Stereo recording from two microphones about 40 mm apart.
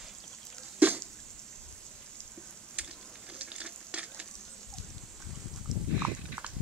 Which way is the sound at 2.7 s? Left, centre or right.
Right.